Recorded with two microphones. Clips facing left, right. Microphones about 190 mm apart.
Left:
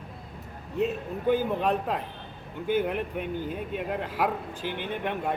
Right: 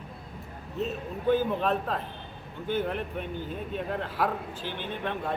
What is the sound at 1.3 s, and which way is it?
A man's voice, 15° left (ahead or behind).